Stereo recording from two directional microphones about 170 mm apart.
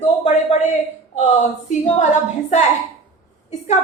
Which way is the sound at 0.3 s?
45° left (ahead or behind).